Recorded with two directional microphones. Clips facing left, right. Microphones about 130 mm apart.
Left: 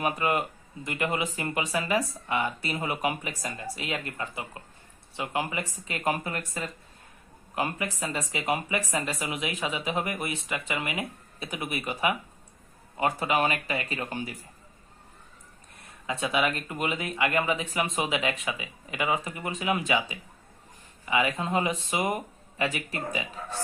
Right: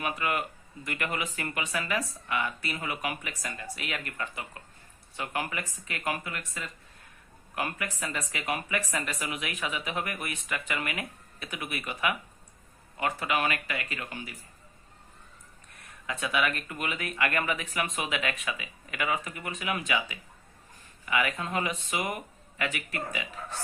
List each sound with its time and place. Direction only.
0.0 s speech: 30° left (ahead or behind)
7.5 s speech: 25° left (ahead or behind)
15.8 s speech: 30° left (ahead or behind)